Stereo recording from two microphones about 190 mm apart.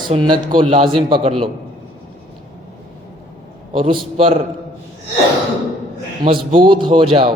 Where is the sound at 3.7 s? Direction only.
30° right (ahead or behind).